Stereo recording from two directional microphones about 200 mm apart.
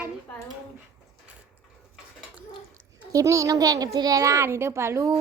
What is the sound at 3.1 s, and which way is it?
A child's voice, 15° right (ahead or behind).